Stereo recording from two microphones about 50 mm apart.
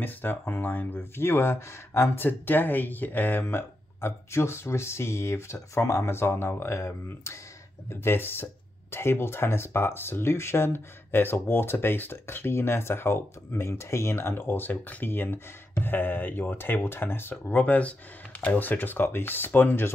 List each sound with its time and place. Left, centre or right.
0.0 s speech: left
2.2 s speech: left
6.0 s speech: left